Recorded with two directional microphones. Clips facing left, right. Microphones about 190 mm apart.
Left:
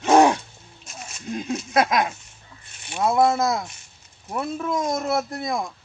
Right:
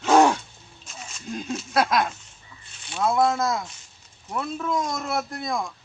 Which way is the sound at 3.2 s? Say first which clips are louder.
Left 5 dB; 15° left (ahead or behind).